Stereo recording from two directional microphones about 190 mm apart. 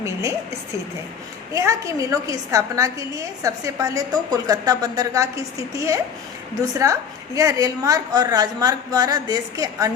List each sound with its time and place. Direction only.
0.0 s a woman's voice: 15° right (ahead or behind)
1.5 s a woman's voice: 15° right (ahead or behind)
7.3 s a woman's voice: 20° right (ahead or behind)